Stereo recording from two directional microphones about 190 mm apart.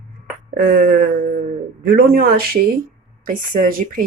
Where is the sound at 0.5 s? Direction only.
50° right (ahead or behind).